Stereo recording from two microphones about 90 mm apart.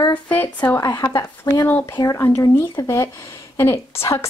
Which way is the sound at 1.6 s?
20° left (ahead or behind).